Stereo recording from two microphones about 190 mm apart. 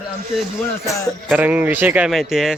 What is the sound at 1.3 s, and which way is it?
Speech, 10° right (ahead or behind).